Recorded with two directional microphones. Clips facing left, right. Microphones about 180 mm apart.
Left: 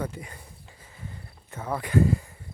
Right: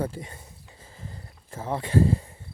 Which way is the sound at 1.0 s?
30° right (ahead or behind).